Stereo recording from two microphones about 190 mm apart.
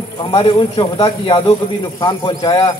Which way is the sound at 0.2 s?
30° left (ahead or behind).